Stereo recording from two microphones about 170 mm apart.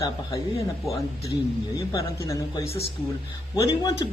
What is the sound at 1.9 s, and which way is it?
Speech, 20° left (ahead or behind).